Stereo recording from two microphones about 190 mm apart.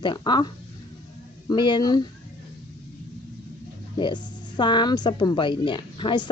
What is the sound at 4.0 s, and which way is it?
A woman's voice, 25° left (ahead or behind).